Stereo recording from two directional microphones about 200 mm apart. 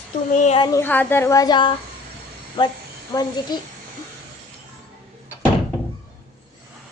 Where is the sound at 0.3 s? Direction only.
35° left (ahead or behind).